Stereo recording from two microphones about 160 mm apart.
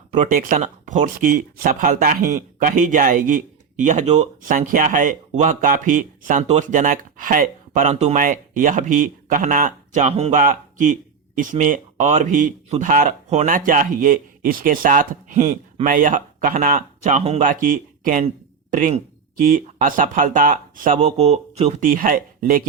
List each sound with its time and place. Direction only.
0.1 s speech: 50° right (ahead or behind)
10.3 s speech: 55° right (ahead or behind)
17.4 s speech: 55° right (ahead or behind); by 21.8 s 40° right (ahead or behind)
21.8 s speech: 60° right (ahead or behind)